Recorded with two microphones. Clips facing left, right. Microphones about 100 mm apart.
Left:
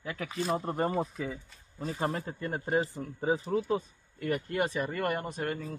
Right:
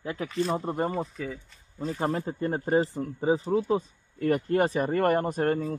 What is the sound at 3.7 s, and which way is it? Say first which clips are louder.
A man's voice: right 4 dB; 35° right (ahead or behind).